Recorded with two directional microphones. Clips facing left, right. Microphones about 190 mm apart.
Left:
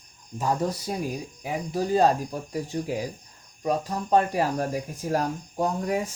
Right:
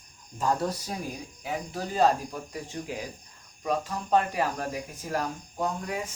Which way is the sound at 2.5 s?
40° left (ahead or behind).